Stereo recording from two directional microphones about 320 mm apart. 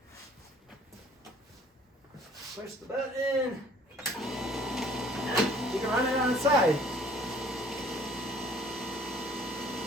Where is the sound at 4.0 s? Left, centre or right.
Centre.